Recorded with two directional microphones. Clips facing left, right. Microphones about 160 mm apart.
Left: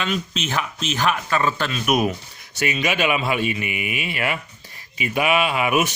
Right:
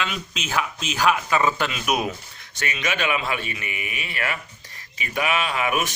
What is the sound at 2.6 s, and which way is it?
Speech, 15° left (ahead or behind).